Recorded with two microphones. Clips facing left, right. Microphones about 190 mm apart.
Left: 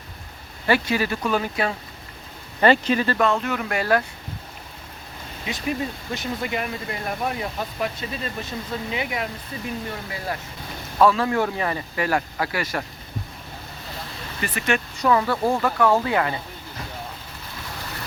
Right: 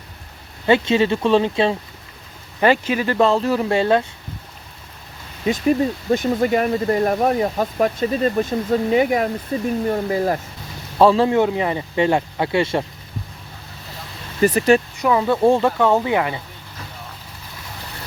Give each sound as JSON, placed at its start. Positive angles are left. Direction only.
{"t": 0.7, "sound": "speech", "side_deg": -25}
{"t": 2.6, "sound": "speech", "side_deg": -10}
{"t": 3.2, "sound": "speech", "side_deg": -30}
{"t": 6.1, "sound": "speech", "side_deg": -45}
{"t": 10.9, "sound": "speech", "side_deg": -30}
{"t": 14.4, "sound": "speech", "side_deg": -40}
{"t": 15.0, "sound": "speech", "side_deg": -15}